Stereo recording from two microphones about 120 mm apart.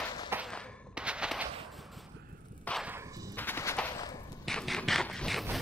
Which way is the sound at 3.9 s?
30° left (ahead or behind).